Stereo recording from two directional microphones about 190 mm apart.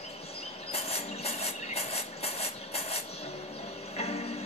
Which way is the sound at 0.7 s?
35° left (ahead or behind).